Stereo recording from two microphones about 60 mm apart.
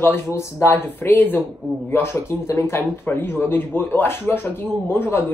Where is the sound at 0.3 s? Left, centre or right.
Left.